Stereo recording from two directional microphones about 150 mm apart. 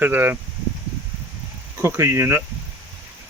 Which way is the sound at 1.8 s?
15° right (ahead or behind).